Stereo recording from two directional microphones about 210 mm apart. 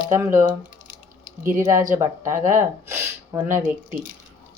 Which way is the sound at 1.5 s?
10° right (ahead or behind).